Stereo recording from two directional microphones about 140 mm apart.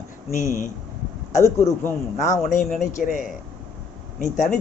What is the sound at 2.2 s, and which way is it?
Speech, 65° left (ahead or behind).